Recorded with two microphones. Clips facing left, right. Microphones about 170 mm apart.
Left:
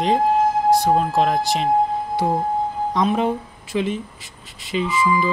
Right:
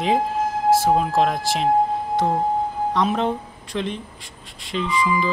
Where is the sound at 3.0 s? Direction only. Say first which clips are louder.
Left 2 dB; 5° left (ahead or behind).